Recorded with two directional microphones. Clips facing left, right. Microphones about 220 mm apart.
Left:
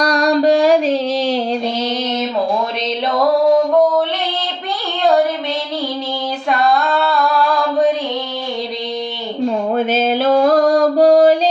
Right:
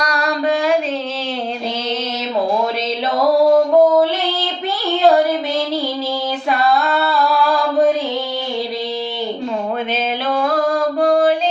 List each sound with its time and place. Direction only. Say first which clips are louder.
0.0 s music: left 6 dB; 35° left (ahead or behind)
6.5 s female singing: left 1 dB; 5° right (ahead or behind)
9.7 s music: left 6 dB; 40° left (ahead or behind)